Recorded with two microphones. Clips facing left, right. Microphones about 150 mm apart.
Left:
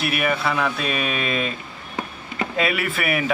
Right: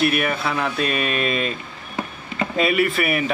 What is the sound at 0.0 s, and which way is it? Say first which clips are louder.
Speech: right 2 dB; centre (ahead or behind).